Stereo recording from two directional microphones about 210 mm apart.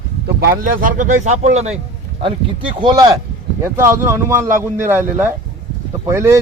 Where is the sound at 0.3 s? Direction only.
45° right (ahead or behind).